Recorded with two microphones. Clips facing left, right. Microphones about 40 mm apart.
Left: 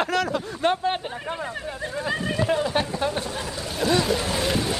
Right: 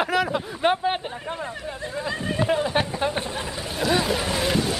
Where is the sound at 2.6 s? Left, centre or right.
Centre.